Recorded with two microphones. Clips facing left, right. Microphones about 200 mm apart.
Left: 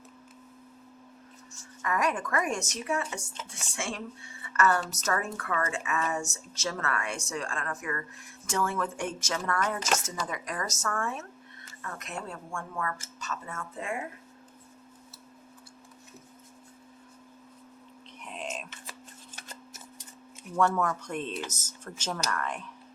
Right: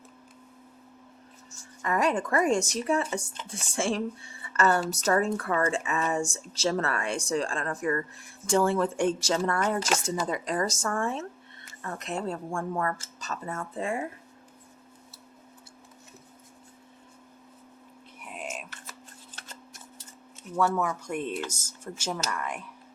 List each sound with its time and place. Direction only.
1.8 s speech: 30° right (ahead or behind)
18.2 s whispering: 5° right (ahead or behind)
20.6 s speech: 5° right (ahead or behind)